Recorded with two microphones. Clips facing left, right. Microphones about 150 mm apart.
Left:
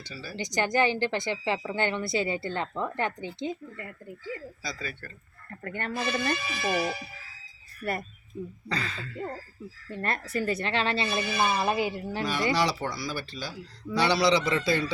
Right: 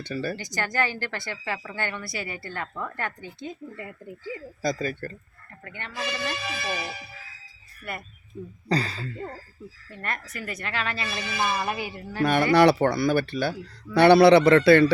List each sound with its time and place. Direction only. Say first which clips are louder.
0.0 s speech: right 11 dB; 55° right (ahead or behind)
0.3 s speech: left 3 dB; 20° left (ahead or behind)
3.8 s speech: right 2 dB; 20° right (ahead or behind)
4.6 s speech: right 10 dB; 45° right (ahead or behind)
5.6 s speech: left 3 dB; 45° left (ahead or behind)
7.8 s speech: left 5 dB; 40° left (ahead or behind)
8.7 s speech: right 8 dB; 35° right (ahead or behind)
10.0 s speech: left 5 dB; 30° left (ahead or behind)
12.2 s speech: right 9 dB; 60° right (ahead or behind)